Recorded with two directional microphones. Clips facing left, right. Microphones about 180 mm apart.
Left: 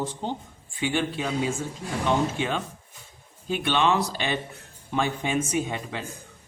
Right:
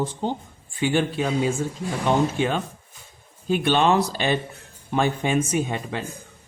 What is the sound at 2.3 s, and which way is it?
Speech, 45° right (ahead or behind).